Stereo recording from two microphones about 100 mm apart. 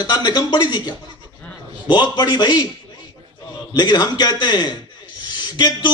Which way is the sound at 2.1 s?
45° left (ahead or behind).